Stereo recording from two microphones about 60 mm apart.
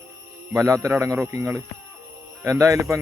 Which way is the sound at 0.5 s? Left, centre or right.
Right.